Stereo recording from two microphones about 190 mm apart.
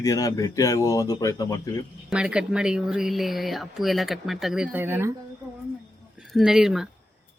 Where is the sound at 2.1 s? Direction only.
5° right (ahead or behind).